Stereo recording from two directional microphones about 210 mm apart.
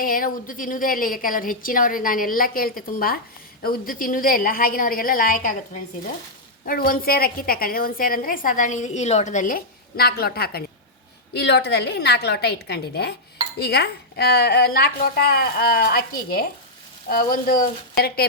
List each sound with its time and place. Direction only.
0.0 s a woman's voice: 40° left (ahead or behind)